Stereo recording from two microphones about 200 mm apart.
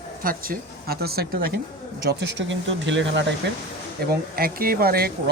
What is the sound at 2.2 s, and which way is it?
Speech, 65° right (ahead or behind).